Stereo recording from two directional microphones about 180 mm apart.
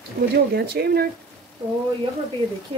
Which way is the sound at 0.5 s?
60° right (ahead or behind).